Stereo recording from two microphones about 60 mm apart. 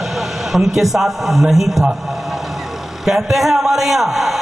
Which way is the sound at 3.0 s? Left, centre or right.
Centre.